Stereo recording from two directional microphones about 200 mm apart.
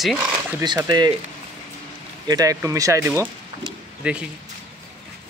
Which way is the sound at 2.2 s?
20° right (ahead or behind).